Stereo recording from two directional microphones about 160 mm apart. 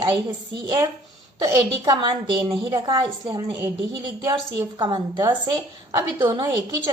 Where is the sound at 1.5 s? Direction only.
25° right (ahead or behind).